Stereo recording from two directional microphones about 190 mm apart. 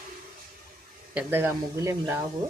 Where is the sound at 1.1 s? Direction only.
10° right (ahead or behind).